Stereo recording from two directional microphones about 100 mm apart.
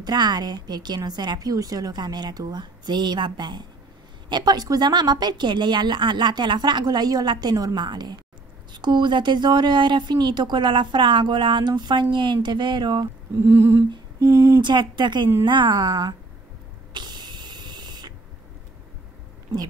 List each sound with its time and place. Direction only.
0.0 s speech: 45° right (ahead or behind)
13.4 s humming: 25° right (ahead or behind)
14.6 s speech: 50° right (ahead or behind)
16.9 s a sound: 45° right (ahead or behind)